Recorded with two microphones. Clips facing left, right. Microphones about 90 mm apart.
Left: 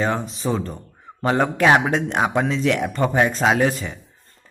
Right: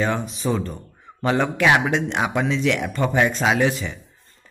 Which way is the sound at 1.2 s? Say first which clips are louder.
Left 2 dB; 40° left (ahead or behind).